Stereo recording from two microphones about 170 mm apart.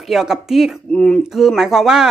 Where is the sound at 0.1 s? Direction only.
Centre (ahead or behind).